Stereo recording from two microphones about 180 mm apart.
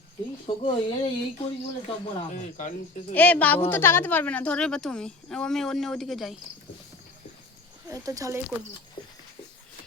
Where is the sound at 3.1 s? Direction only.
10° left (ahead or behind).